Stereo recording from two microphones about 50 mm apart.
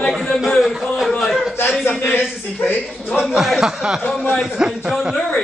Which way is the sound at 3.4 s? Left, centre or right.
Centre.